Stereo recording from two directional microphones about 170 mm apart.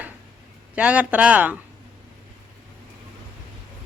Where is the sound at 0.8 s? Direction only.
10° right (ahead or behind).